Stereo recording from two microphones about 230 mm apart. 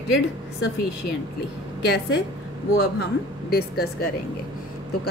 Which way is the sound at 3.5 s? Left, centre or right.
Left.